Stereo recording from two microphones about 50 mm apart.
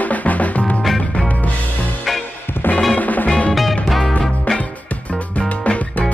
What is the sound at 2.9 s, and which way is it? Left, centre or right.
Music, left.